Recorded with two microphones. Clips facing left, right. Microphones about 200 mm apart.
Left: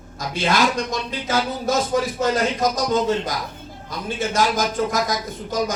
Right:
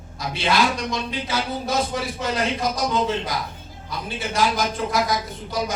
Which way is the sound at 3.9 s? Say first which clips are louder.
Left 4 dB; 45° left (ahead or behind).